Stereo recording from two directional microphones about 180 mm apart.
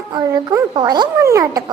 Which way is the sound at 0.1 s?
20° right (ahead or behind).